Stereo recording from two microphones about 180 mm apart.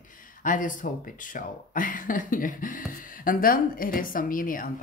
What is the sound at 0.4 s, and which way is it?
A woman's voice, 45° left (ahead or behind).